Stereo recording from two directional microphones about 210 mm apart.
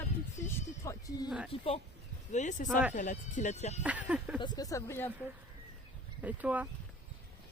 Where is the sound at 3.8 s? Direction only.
5° right (ahead or behind).